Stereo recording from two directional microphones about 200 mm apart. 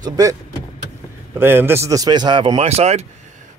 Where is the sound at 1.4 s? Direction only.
10° right (ahead or behind).